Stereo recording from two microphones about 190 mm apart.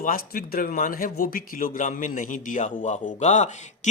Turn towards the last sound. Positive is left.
turn(degrees=40)  # may be behind; listen again after turning